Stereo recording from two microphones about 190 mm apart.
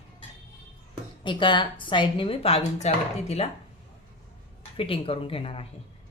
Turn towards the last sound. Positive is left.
turn(degrees=30)  # may be behind; listen again after turning